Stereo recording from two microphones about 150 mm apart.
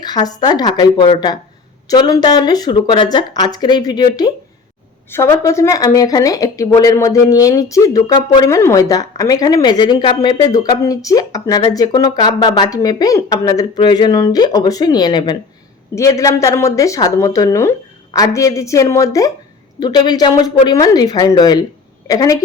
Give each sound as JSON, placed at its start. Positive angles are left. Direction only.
{"t": 0.0, "sound": "a woman's voice", "side_deg": 25}